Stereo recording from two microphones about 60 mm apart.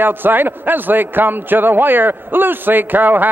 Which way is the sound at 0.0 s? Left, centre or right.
Right.